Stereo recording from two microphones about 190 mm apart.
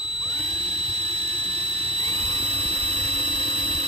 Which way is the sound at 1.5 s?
30° right (ahead or behind).